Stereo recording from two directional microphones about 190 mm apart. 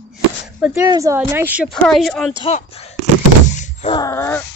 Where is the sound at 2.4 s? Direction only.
30° left (ahead or behind).